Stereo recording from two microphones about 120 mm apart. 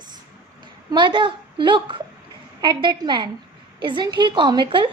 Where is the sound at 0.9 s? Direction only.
40° right (ahead or behind).